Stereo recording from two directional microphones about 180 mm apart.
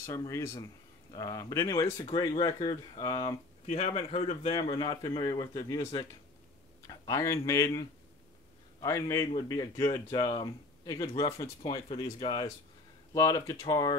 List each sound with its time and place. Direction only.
0.0 s speech: 15° left (ahead or behind)
3.6 s speech: 40° left (ahead or behind); by 7.8 s 15° left (ahead or behind)
8.8 s speech: 15° left (ahead or behind)
11.7 s speech: 30° left (ahead or behind)